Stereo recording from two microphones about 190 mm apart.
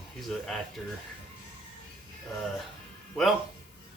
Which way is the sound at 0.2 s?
Centre (ahead or behind).